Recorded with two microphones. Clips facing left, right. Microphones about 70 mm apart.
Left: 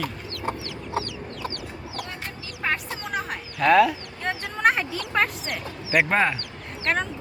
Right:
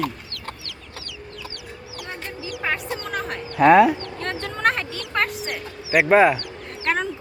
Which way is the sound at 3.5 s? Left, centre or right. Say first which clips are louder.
Right 4 dB; right.